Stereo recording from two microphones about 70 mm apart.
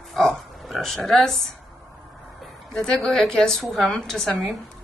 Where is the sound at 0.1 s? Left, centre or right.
Centre.